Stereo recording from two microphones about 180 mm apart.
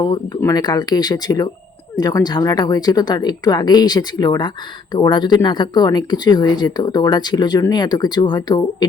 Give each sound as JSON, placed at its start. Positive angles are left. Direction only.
{"t": 0.0, "sound": "speech", "side_deg": 20}